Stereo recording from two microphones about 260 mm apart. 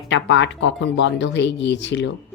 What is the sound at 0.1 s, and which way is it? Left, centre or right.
A woman's voice, left.